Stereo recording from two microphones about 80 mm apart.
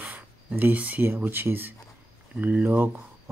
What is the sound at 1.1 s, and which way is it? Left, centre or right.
Speech, right.